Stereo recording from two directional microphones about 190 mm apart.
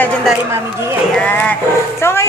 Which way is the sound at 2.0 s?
15° left (ahead or behind).